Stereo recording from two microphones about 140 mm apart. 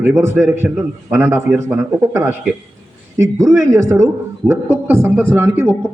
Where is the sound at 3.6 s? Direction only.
20° right (ahead or behind).